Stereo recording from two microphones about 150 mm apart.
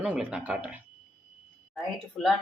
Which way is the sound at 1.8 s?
Centre (ahead or behind).